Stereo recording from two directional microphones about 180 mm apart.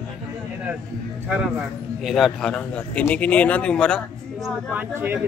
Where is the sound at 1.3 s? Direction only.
5° right (ahead or behind).